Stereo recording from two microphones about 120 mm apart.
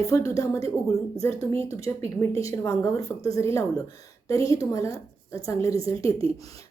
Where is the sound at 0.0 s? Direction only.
30° left (ahead or behind).